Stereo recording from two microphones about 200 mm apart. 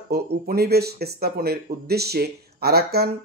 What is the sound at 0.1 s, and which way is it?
Speech, 50° right (ahead or behind).